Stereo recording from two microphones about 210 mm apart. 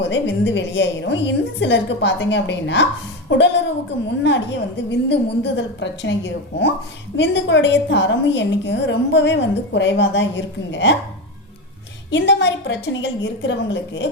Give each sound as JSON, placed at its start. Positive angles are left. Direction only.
{"t": 0.0, "sound": "a woman's voice", "side_deg": 60}
{"t": 12.1, "sound": "a woman's voice", "side_deg": 60}